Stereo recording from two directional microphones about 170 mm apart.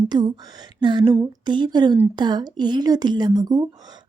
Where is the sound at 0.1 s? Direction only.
25° right (ahead or behind).